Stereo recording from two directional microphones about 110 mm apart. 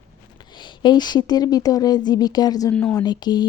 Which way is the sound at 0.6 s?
40° left (ahead or behind).